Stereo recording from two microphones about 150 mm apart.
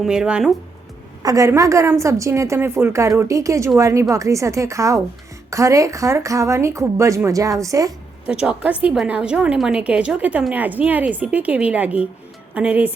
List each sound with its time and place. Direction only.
0.0 s speech: 5° right (ahead or behind)
1.2 s speech: 20° right (ahead or behind)
8.3 s a woman's voice: 10° right (ahead or behind)